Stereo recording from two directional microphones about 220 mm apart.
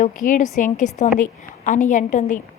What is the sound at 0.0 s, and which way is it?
A woman's voice, 35° left (ahead or behind).